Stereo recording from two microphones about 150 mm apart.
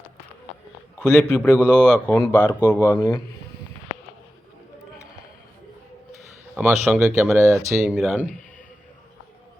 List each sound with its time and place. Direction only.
0.9 s a man's voice: 5° left (ahead or behind)
6.5 s a man's voice: 5° right (ahead or behind)
7.3 s speech: 20° right (ahead or behind)
7.7 s speech: centre (ahead or behind)